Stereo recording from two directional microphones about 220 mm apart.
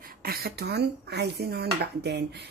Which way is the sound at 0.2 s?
45° right (ahead or behind).